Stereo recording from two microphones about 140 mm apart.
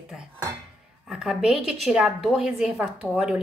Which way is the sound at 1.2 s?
5° right (ahead or behind).